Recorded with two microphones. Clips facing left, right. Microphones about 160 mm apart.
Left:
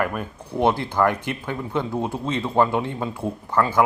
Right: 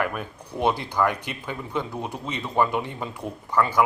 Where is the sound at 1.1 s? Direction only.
15° right (ahead or behind).